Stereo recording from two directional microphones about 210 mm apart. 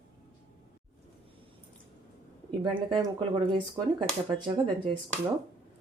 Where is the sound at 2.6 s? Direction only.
20° right (ahead or behind).